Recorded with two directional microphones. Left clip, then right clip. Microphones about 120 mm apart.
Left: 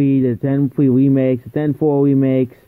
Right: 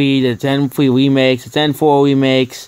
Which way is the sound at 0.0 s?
35° left (ahead or behind).